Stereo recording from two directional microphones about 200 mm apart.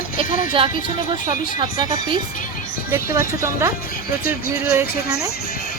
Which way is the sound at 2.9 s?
10° right (ahead or behind).